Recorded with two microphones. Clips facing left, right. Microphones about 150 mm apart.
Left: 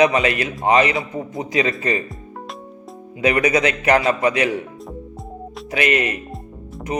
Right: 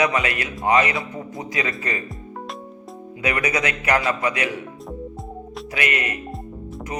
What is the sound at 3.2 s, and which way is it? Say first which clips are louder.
A man's voice: left 6 dB; 25° left (ahead or behind).